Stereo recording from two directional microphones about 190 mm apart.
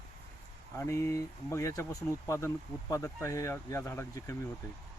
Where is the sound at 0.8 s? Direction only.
15° left (ahead or behind).